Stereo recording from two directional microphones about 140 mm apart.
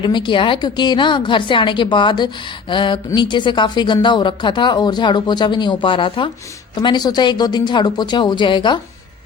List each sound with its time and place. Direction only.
0.0 s speech: 35° left (ahead or behind)